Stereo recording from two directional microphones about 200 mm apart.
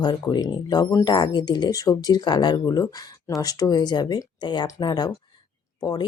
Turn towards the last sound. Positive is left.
turn(degrees=20)  # may be behind; listen again after turning